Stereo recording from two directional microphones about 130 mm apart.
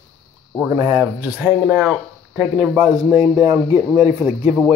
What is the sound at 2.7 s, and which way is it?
Speech, 20° right (ahead or behind).